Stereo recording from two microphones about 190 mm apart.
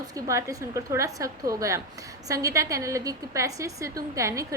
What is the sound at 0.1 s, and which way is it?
A woman's voice, 15° right (ahead or behind).